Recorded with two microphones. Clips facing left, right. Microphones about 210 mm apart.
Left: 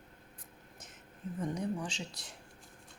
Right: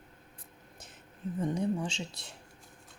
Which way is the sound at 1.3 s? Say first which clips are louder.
Right 5 dB; 25° right (ahead or behind).